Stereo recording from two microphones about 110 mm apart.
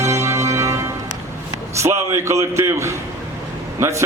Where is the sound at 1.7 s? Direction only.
25° right (ahead or behind).